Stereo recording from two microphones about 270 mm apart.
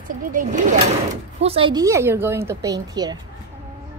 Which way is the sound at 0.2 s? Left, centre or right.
Right.